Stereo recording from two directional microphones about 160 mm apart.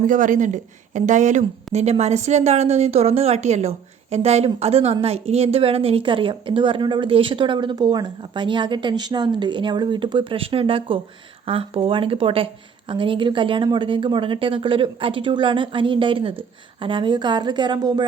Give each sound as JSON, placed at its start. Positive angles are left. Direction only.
{"t": 0.1, "sound": "a woman's voice", "side_deg": -55}